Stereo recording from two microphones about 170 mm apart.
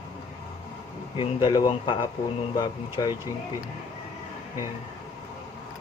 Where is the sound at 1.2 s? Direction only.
30° left (ahead or behind).